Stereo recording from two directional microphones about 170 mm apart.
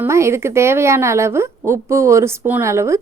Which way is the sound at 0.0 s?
15° right (ahead or behind).